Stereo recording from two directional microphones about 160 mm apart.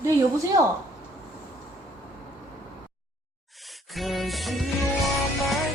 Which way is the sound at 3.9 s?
Centre (ahead or behind).